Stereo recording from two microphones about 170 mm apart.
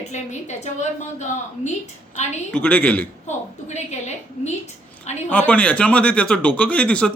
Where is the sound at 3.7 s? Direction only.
40° left (ahead or behind).